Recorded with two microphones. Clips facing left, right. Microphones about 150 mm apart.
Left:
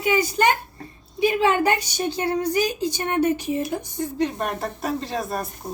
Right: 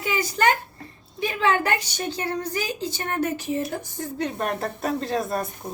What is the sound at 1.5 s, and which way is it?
A woman's voice, 15° left (ahead or behind).